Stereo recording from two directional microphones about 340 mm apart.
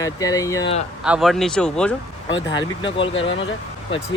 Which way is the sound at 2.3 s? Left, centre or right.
Centre.